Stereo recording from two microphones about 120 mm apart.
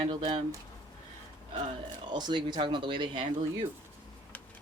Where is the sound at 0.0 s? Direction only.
45° right (ahead or behind).